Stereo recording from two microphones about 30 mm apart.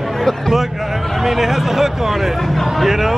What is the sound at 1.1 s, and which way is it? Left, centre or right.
Speech, centre.